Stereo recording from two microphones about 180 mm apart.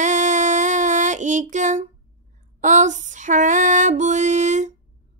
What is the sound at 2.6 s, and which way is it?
Female singing, 40° right (ahead or behind).